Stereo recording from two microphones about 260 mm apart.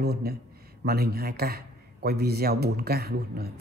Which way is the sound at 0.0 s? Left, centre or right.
Right.